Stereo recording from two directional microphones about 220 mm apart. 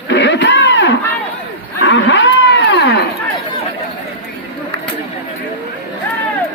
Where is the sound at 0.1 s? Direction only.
55° left (ahead or behind).